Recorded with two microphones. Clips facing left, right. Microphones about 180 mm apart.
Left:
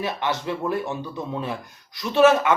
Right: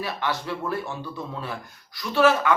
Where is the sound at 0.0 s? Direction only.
20° left (ahead or behind).